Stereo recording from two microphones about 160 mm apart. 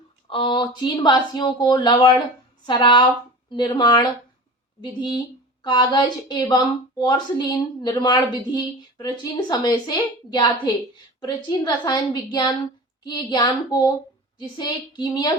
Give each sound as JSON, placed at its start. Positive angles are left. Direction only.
{"t": 0.3, "sound": "a woman's voice", "side_deg": 30}